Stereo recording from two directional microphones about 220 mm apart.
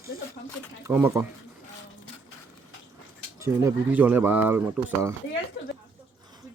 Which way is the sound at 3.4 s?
10° right (ahead or behind).